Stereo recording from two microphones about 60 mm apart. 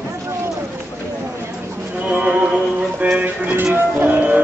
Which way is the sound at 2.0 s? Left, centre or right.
Centre.